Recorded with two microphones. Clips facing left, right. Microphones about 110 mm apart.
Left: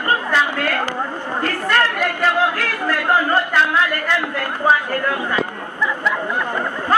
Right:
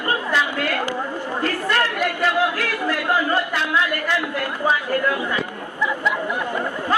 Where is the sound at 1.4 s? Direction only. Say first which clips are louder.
Left 3 dB; 45° left (ahead or behind).